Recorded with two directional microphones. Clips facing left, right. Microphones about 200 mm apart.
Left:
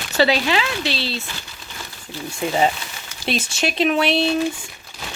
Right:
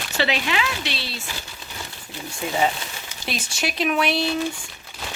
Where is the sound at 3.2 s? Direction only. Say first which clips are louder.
Left 5 dB; 25° left (ahead or behind).